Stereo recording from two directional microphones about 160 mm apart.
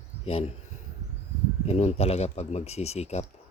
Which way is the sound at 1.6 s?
40° left (ahead or behind).